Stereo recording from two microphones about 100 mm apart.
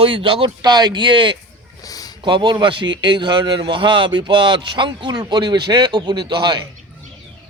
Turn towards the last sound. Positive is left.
turn(degrees=-50)  # may be behind; listen again after turning